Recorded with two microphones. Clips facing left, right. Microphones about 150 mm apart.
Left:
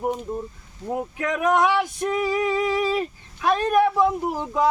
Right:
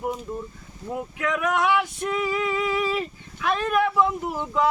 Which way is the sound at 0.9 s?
35° left (ahead or behind).